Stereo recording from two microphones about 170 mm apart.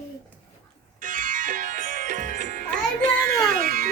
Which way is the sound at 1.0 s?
50° right (ahead or behind).